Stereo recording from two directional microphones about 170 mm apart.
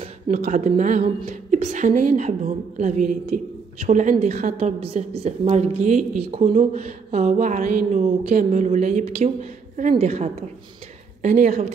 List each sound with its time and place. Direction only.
0.0 s a woman's voice: 45° right (ahead or behind)